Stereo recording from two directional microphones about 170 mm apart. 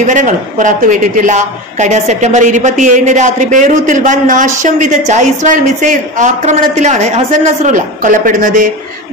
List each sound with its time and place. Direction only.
0.0 s a woman's voice: 45° right (ahead or behind)